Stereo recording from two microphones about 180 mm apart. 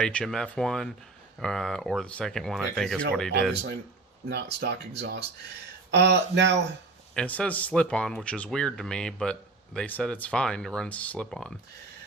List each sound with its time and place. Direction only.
0.0 s speech: 5° left (ahead or behind)
4.3 s speech: 65° right (ahead or behind)
7.1 s speech: 5° left (ahead or behind)